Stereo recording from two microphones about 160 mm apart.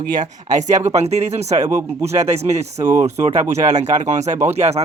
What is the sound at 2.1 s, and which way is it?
Speech, 45° right (ahead or behind).